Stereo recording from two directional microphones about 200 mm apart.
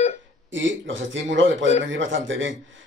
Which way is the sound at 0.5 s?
70° right (ahead or behind).